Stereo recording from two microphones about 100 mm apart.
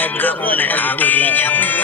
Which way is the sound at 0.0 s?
20° left (ahead or behind).